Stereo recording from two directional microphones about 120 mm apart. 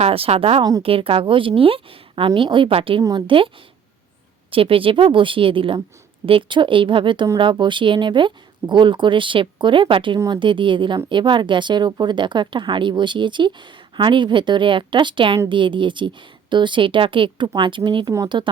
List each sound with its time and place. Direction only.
0.0 s speech: 55° right (ahead or behind)
3.0 s speech: 35° right (ahead or behind)
4.5 s a woman's voice: 50° right (ahead or behind)